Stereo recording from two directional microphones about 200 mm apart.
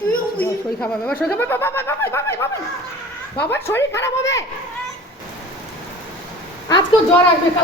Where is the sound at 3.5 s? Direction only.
10° left (ahead or behind).